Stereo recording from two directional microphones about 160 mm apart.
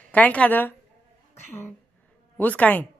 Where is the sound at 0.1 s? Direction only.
10° left (ahead or behind).